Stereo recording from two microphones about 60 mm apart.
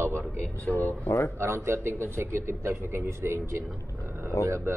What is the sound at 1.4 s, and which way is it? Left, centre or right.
A man's voice, right.